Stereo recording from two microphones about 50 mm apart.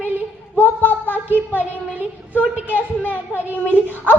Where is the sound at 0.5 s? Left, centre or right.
Left.